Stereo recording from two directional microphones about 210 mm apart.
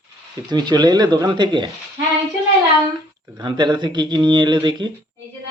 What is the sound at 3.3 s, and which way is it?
Speech, 20° right (ahead or behind).